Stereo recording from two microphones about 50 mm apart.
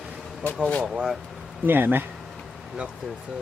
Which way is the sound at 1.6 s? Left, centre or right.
Right.